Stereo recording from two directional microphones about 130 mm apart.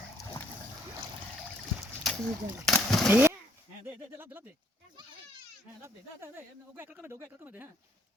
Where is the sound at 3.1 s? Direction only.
15° right (ahead or behind).